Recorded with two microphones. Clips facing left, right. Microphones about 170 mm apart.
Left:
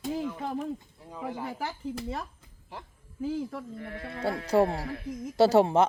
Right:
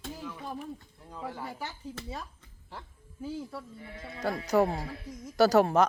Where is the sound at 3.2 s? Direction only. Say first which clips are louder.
Left 5 dB; 55° left (ahead or behind).